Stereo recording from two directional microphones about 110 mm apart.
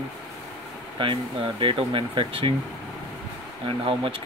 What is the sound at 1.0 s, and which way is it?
Speech, 50° right (ahead or behind).